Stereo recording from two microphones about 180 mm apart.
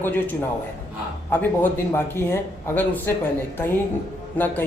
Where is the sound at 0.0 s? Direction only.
10° left (ahead or behind).